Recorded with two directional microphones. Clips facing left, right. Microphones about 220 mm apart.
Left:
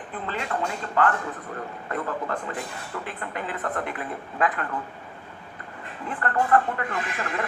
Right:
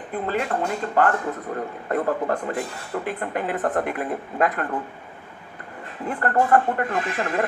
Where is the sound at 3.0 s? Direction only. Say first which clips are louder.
Right 8 dB; 50° right (ahead or behind).